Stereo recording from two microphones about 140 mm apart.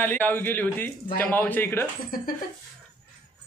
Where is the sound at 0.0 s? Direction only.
15° left (ahead or behind).